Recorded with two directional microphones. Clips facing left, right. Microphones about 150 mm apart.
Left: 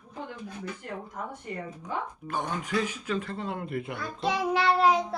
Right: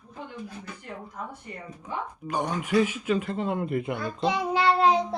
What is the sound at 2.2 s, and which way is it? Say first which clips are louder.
Speech: right 3 dB; 15° right (ahead or behind).